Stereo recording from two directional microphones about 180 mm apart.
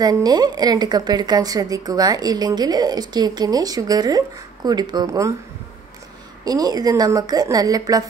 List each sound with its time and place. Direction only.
0.0 s a woman's voice: 20° right (ahead or behind)
6.4 s a woman's voice: 20° right (ahead or behind)